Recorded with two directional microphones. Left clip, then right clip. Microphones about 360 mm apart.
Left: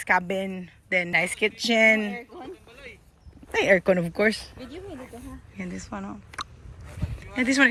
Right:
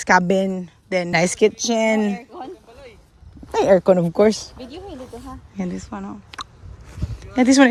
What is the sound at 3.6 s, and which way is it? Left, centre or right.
Speech, centre.